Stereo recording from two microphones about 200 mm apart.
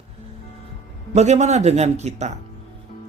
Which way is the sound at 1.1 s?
35° right (ahead or behind).